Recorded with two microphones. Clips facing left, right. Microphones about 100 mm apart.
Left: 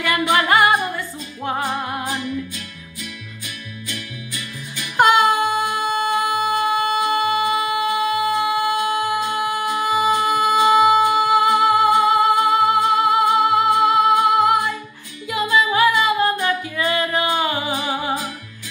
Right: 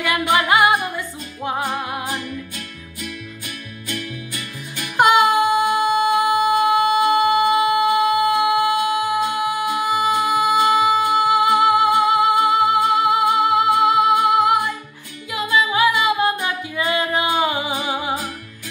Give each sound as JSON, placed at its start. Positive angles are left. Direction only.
{"t": 0.3, "sound": "music", "side_deg": -10}
{"t": 2.0, "sound": "music", "side_deg": -50}
{"t": 3.9, "sound": "music", "side_deg": -50}
{"t": 4.9, "sound": "music", "side_deg": -10}